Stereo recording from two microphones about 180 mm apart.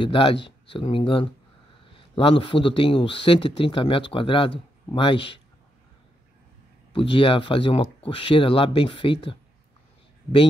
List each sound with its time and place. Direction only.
0.0 s a man's voice: 30° left (ahead or behind)
6.9 s a man's voice: 30° left (ahead or behind)